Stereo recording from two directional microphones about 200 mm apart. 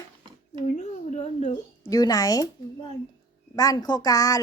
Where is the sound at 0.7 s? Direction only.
35° left (ahead or behind).